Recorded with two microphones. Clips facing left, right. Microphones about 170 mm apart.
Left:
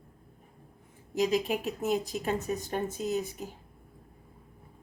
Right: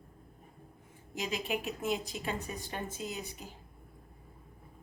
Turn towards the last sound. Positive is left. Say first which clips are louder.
# left 9 dB
turn(degrees=45)  # may be behind; listen again after turning